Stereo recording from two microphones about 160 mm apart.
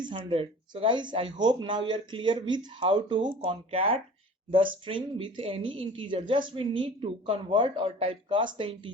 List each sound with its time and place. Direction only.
0.0 s a woman's voice: 30° right (ahead or behind)